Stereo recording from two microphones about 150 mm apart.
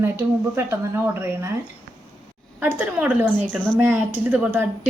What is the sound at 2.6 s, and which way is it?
A woman's voice, 10° right (ahead or behind).